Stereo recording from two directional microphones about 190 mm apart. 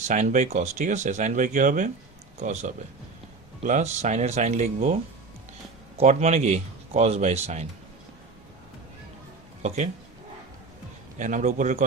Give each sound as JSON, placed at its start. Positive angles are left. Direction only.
{"t": 0.1, "sound": "speech", "side_deg": -40}
{"t": 6.0, "sound": "speech", "side_deg": -35}
{"t": 9.6, "sound": "speech", "side_deg": -40}
{"t": 11.2, "sound": "speech", "side_deg": -40}